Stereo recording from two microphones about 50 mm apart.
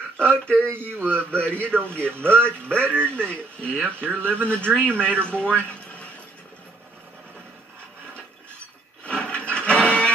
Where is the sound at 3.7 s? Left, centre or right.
Right.